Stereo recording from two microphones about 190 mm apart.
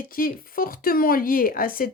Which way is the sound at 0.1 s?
50° left (ahead or behind).